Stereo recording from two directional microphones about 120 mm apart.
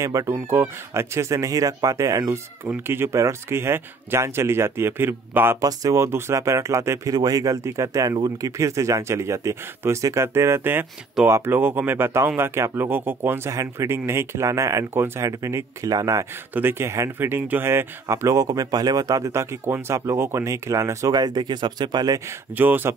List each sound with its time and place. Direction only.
0.0 s speech: 30° right (ahead or behind)
5.6 s speech: 30° right (ahead or behind)
16.5 s speech: 20° right (ahead or behind); by 22.2 s 35° right (ahead or behind)
22.6 s speech: 15° right (ahead or behind)